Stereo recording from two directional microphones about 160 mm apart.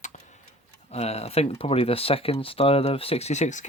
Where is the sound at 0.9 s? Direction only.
40° left (ahead or behind).